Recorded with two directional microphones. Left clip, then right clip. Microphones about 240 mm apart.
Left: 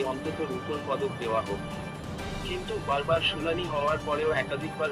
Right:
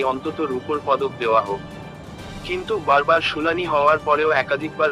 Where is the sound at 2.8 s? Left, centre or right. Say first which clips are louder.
Right 10 dB; centre.